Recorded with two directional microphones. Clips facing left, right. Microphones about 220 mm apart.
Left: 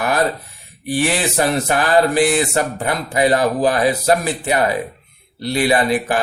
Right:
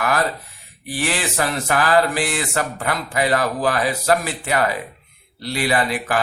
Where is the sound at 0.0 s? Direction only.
20° left (ahead or behind).